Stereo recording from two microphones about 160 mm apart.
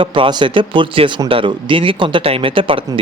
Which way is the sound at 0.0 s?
30° right (ahead or behind).